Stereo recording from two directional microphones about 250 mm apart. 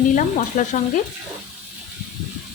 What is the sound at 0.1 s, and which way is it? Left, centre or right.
Speech, left.